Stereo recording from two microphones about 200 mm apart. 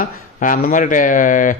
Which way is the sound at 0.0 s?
45° left (ahead or behind).